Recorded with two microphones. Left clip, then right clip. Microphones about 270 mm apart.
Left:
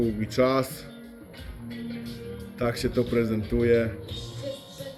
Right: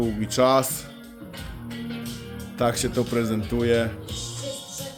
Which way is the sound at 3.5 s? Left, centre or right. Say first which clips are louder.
Even; right.